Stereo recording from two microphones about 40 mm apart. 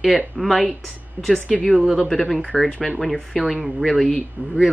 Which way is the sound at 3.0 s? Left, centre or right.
Centre.